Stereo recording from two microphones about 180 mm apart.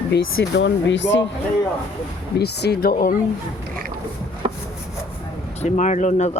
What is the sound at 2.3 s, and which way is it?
Speech, 65° left (ahead or behind).